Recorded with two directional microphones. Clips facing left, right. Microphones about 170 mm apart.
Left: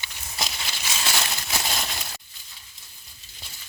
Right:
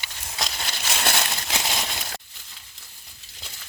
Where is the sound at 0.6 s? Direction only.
55° right (ahead or behind).